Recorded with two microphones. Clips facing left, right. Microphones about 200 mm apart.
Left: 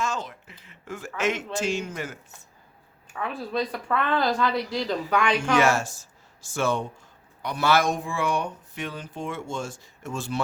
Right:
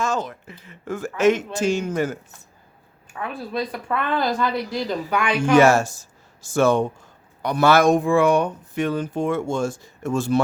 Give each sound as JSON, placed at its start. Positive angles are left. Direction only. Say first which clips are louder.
{"t": 0.0, "sound": "speech", "louder": "right 5 dB", "side_deg": -45}
{"t": 3.1, "sound": "speech", "louder": "right 1 dB", "side_deg": 0}
{"t": 5.5, "sound": "speech", "louder": "right 10 dB", "side_deg": -40}